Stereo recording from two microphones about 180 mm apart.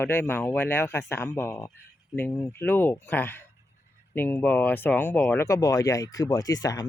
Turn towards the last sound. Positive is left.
turn(degrees=20)  # may be behind; listen again after turning